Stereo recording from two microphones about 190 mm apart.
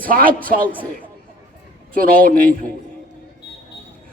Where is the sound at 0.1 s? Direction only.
50° right (ahead or behind).